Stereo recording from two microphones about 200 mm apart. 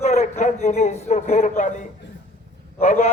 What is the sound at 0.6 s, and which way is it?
Speech, 35° left (ahead or behind).